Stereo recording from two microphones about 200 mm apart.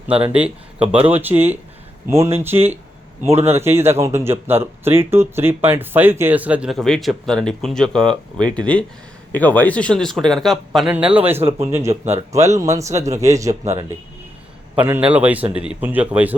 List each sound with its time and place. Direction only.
0.3 s speech: 5° right (ahead or behind)
3.3 s a man's voice: 30° right (ahead or behind)
3.6 s a man's voice: 10° right (ahead or behind)